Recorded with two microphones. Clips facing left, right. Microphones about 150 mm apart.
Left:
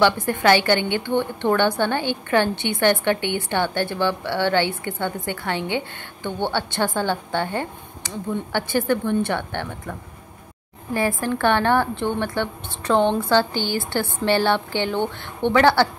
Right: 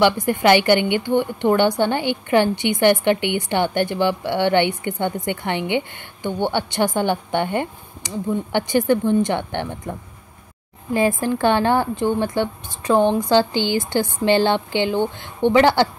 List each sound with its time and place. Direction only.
0.0 s a woman's voice: 15° right (ahead or behind)